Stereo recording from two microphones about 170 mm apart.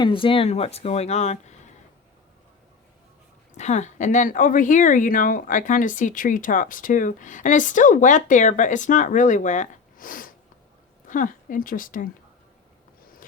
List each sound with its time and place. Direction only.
0.0 s speech: 30° left (ahead or behind)
3.6 s speech: 45° left (ahead or behind)